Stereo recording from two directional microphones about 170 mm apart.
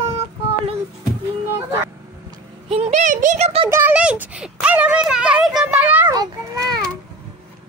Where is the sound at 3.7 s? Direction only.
10° right (ahead or behind).